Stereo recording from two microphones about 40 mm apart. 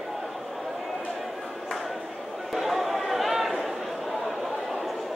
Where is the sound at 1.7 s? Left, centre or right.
Centre.